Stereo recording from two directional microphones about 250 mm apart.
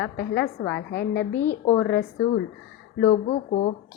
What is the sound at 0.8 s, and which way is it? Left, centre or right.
Speech, left.